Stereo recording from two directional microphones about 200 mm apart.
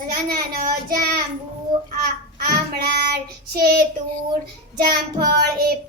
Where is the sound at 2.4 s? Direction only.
50° right (ahead or behind).